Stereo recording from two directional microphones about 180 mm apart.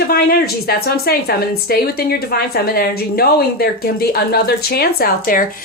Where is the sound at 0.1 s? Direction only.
60° left (ahead or behind).